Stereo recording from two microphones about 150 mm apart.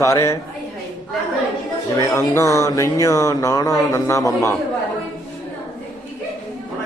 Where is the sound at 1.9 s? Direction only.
20° left (ahead or behind).